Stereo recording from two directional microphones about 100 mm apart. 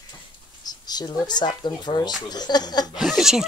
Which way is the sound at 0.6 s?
40° left (ahead or behind).